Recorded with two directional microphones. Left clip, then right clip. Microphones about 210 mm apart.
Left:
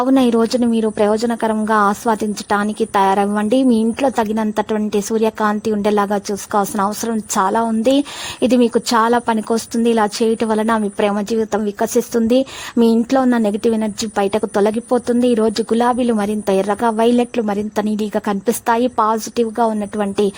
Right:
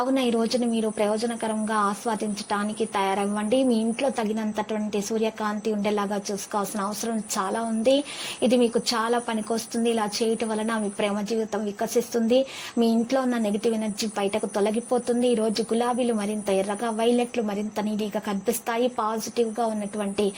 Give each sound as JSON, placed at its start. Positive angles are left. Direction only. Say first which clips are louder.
{"t": 0.0, "sound": "a woman's voice", "louder": "left 9 dB", "side_deg": 40}